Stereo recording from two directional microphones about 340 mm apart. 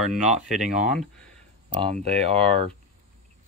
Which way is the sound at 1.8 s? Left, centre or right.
Centre.